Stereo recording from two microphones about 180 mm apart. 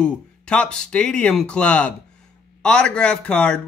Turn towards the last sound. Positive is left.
turn(degrees=5)  # may be behind; listen again after turning